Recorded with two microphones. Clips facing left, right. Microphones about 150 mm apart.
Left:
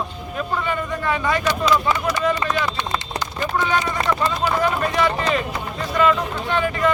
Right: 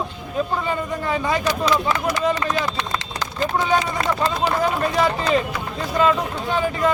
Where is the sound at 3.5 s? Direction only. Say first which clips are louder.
Right 1 dB; 35° right (ahead or behind).